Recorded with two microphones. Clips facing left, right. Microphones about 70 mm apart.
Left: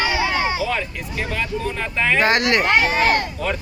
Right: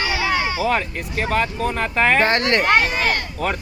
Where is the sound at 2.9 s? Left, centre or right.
Left.